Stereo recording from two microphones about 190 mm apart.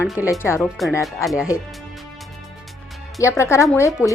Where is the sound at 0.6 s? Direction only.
5° left (ahead or behind).